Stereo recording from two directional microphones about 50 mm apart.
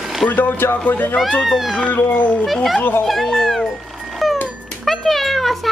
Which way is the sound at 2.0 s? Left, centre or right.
Left.